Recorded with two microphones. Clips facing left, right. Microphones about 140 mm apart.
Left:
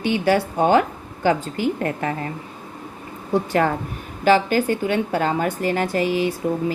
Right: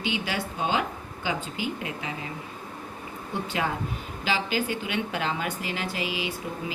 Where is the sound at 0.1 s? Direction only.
50° left (ahead or behind).